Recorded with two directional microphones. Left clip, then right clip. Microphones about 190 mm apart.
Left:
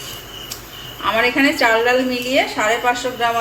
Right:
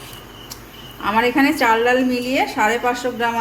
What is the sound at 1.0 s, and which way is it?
A woman's voice, 60° right (ahead or behind).